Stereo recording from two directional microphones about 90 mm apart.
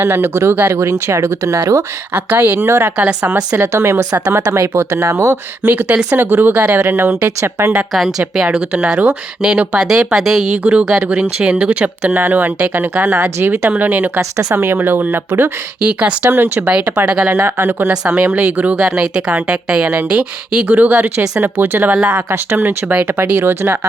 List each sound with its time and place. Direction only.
0.0 s a woman's voice: 25° right (ahead or behind)
2.1 s a woman's voice: 20° right (ahead or behind)
3.0 s a woman's voice: 15° right (ahead or behind)
3.5 s a woman's voice: 30° right (ahead or behind)
8.4 s a woman's voice: 15° right (ahead or behind)
10.6 s a woman's voice: 15° right (ahead or behind)
14.2 s a woman's voice: 30° right (ahead or behind); by 17.0 s 15° right (ahead or behind)
17.2 s a woman's voice: 25° right (ahead or behind)